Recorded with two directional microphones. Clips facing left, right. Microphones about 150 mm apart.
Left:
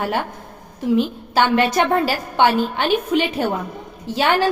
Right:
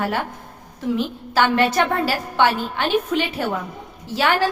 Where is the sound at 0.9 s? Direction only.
20° left (ahead or behind).